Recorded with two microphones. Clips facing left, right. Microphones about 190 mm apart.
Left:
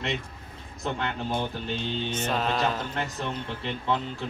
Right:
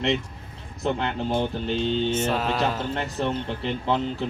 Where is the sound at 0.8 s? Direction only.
30° right (ahead or behind).